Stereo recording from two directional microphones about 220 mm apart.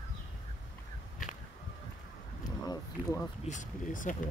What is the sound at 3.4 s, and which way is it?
Speech, 35° left (ahead or behind).